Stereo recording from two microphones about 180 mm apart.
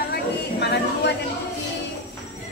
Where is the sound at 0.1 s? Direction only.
70° left (ahead or behind).